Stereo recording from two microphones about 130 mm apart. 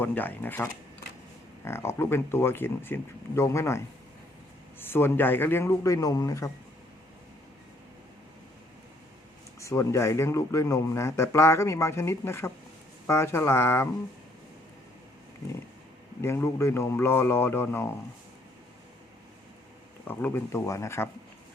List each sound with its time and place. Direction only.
0.0 s a man's voice: 15° left (ahead or behind)
9.6 s speech: 25° left (ahead or behind)
16.2 s speech: 20° left (ahead or behind)
20.1 s speech: 15° left (ahead or behind)